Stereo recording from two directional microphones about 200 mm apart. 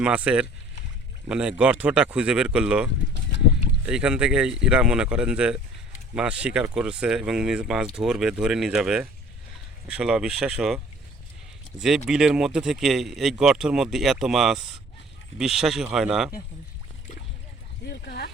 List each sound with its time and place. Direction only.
0.0 s speech: 5° right (ahead or behind)
11.8 s speech: centre (ahead or behind)
17.8 s speech: 55° left (ahead or behind)